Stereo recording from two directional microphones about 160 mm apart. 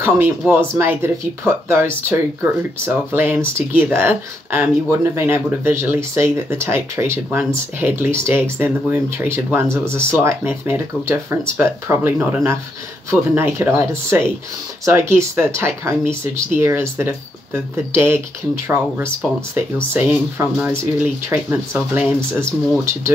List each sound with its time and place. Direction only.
0.0 s speech: 15° right (ahead or behind)